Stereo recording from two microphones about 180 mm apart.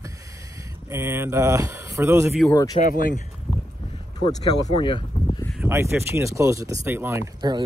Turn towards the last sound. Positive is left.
turn(degrees=-20)  # may be behind; listen again after turning